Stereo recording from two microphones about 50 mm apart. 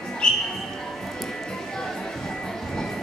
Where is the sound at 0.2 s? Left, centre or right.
Centre.